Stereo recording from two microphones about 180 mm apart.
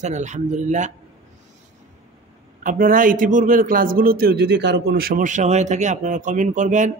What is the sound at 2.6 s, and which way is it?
Speech, 50° right (ahead or behind).